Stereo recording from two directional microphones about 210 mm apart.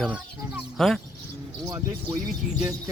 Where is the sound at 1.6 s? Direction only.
20° right (ahead or behind).